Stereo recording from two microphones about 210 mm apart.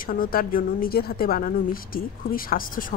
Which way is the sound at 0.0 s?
40° left (ahead or behind).